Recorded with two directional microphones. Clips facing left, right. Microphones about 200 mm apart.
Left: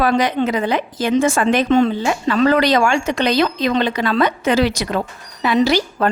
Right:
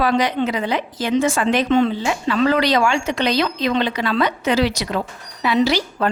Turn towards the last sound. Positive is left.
turn(degrees=50)  # may be behind; listen again after turning